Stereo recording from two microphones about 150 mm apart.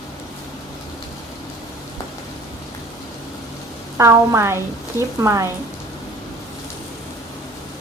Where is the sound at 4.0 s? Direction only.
20° right (ahead or behind).